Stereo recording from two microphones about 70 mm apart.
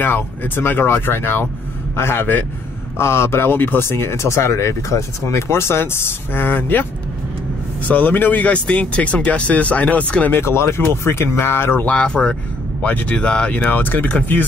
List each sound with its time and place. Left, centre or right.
0.0 s speech: left
10.3 s speech: left
11.8 s speech: centre
13.7 s speech: left